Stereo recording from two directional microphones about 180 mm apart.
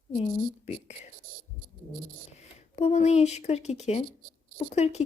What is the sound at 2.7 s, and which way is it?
Speech, 40° left (ahead or behind).